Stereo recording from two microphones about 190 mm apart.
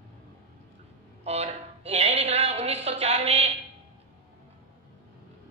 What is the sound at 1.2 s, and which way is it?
A woman's voice, 35° right (ahead or behind).